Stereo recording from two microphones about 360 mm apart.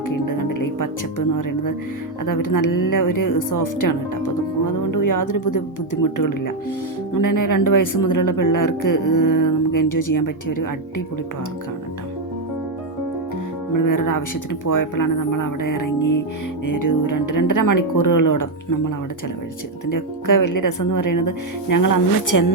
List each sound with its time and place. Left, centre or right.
0.1 s music: left
1.4 s speech: left
13.7 s speech: left
19.9 s speech: left